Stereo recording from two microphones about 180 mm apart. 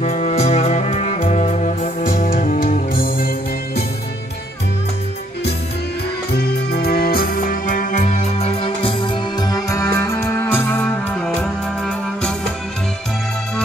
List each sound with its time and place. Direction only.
0.0 s music: 35° left (ahead or behind); by 3.8 s 55° left (ahead or behind)
6.3 s music: 60° left (ahead or behind); by 12.4 s 5° left (ahead or behind)